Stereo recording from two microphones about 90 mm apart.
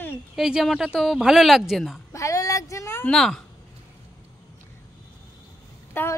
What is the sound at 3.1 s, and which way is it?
Speech, 5° left (ahead or behind).